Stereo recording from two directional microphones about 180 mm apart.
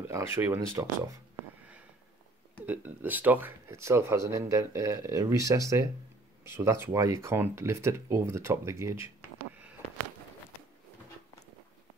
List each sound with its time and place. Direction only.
0.1 s speech: 15° right (ahead or behind)
2.6 s speech: 10° right (ahead or behind)